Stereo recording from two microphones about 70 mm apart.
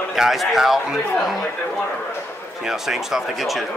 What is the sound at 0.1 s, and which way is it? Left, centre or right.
Speech, centre.